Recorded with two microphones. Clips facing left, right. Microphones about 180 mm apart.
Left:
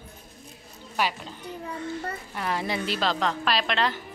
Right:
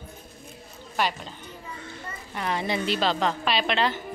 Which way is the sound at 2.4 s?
Centre (ahead or behind).